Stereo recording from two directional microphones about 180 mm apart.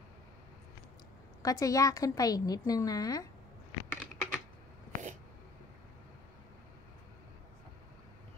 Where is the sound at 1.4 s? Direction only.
20° left (ahead or behind).